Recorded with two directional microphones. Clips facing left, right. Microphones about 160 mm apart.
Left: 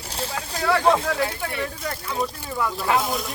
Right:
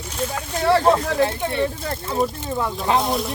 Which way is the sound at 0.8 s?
Centre (ahead or behind).